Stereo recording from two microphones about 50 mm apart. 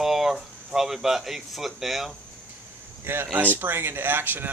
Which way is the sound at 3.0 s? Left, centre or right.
Right.